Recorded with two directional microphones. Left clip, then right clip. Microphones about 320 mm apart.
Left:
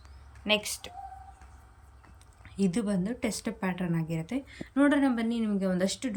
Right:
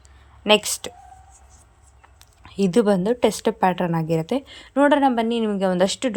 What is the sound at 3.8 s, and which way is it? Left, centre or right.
Speech, right.